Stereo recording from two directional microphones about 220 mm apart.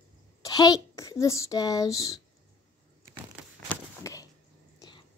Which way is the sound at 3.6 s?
15° left (ahead or behind).